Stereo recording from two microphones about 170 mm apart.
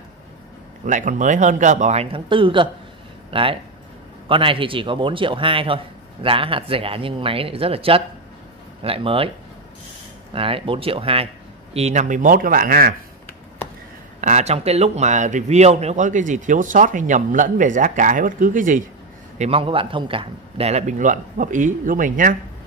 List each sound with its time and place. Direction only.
0.8 s a man's voice: 50° right (ahead or behind); by 9.3 s 35° right (ahead or behind)
10.3 s a man's voice: 35° right (ahead or behind); by 12.9 s 60° right (ahead or behind)
14.2 s a man's voice: 40° right (ahead or behind)
19.3 s a man's voice: 40° right (ahead or behind)